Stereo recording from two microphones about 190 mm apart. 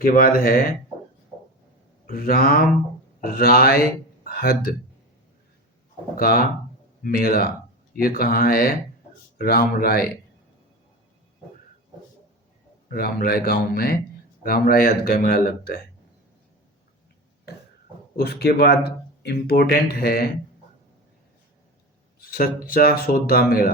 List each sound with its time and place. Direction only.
0.0 s speech: 50° left (ahead or behind)
2.0 s a man's voice: 50° left (ahead or behind)
6.1 s speech: 50° left (ahead or behind)
12.9 s speech: 50° left (ahead or behind)
18.2 s speech: 55° left (ahead or behind)
22.2 s speech: 50° left (ahead or behind)